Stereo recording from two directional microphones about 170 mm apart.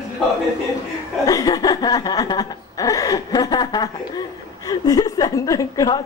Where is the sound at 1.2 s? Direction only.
20° left (ahead or behind).